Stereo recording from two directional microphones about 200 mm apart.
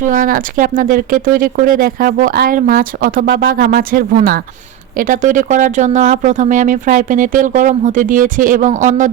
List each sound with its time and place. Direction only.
0.0 s speech: 40° right (ahead or behind)